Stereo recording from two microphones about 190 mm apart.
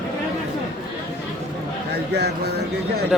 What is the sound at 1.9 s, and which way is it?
Speech, 60° right (ahead or behind).